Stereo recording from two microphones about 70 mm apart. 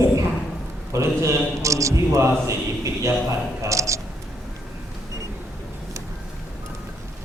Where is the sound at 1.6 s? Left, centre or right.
Right.